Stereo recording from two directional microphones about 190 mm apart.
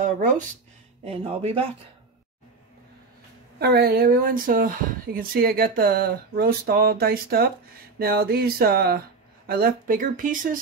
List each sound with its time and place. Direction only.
1.0 s speech: 35° right (ahead or behind)
3.5 s speech: 55° right (ahead or behind)